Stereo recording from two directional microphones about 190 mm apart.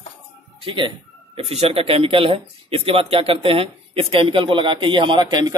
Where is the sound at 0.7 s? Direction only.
25° right (ahead or behind).